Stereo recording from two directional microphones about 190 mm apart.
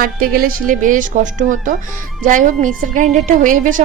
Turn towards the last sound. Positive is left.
turn(degrees=-45)  # may be behind; listen again after turning